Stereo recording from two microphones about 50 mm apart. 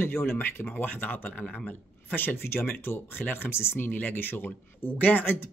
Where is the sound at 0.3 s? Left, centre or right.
Left.